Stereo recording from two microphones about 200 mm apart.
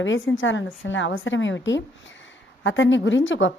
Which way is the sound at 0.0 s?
70° left (ahead or behind).